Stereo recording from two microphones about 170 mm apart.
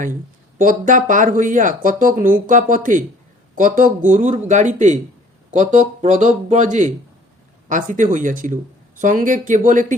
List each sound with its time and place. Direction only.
0.6 s speech: 50° right (ahead or behind)